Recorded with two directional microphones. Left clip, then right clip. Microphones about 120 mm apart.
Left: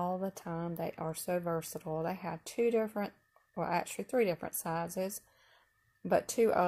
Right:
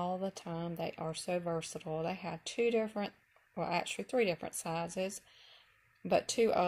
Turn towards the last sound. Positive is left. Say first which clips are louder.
# left 1 dB
turn(degrees=15)  # may be behind; listen again after turning